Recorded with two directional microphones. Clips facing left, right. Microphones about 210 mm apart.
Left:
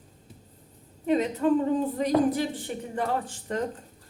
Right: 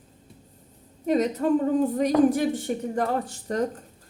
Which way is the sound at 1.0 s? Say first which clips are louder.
Right 1 dB; 40° right (ahead or behind).